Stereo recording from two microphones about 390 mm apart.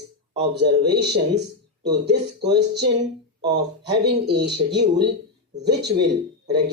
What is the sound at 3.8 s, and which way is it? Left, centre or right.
Speech, right.